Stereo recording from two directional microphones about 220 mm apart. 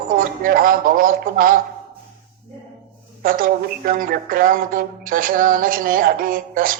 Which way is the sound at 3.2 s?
40° right (ahead or behind).